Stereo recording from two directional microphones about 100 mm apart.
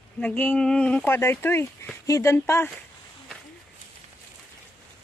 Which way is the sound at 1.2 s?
25° left (ahead or behind).